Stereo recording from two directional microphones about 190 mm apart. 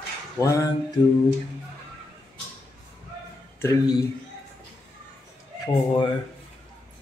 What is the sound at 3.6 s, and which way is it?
Speech, 20° left (ahead or behind).